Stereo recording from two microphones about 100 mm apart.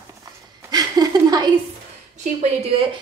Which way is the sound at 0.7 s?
40° right (ahead or behind).